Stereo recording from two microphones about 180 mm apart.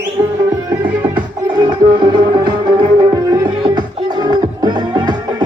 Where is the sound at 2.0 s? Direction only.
25° right (ahead or behind).